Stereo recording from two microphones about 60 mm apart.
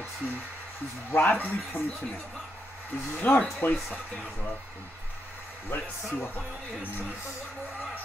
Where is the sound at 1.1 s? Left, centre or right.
Left.